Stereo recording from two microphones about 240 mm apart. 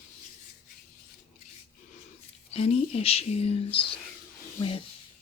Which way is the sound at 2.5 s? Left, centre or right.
Left.